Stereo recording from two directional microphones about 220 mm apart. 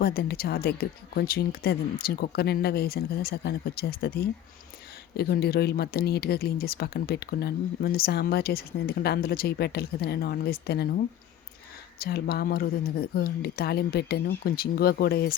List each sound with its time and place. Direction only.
0.0 s speech: 45° left (ahead or behind)